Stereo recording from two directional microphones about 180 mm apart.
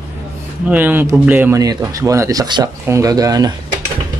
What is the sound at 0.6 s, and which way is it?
Speech, 10° right (ahead or behind).